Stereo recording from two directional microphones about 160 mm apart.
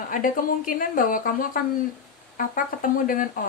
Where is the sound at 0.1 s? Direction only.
60° left (ahead or behind).